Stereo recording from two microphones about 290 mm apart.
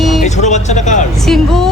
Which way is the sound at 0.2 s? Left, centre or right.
Left.